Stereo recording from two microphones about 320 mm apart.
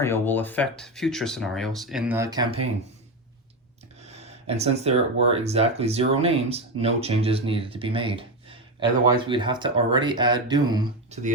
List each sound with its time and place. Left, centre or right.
0.0 s speech: centre
4.0 s speech: centre